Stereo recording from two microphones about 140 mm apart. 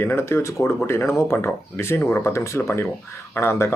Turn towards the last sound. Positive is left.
turn(degrees=20)  # may be behind; listen again after turning